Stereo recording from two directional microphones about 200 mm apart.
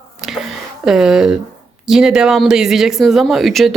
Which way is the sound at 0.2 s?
Centre (ahead or behind).